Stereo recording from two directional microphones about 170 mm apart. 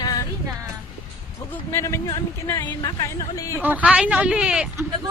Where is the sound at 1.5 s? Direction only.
15° left (ahead or behind).